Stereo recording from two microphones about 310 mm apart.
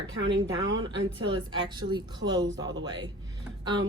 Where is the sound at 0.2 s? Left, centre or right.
Right.